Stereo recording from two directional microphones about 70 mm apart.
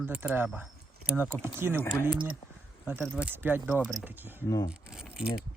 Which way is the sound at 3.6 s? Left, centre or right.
Centre.